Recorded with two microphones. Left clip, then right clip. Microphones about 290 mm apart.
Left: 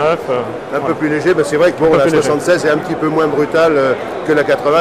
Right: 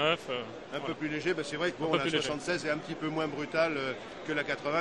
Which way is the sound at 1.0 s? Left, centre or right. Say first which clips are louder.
Left 19 dB; right.